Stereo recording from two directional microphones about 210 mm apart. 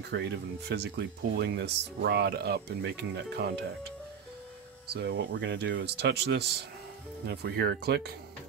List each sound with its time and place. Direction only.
0.0 s speech: 55° right (ahead or behind)
4.8 s speech: 50° right (ahead or behind)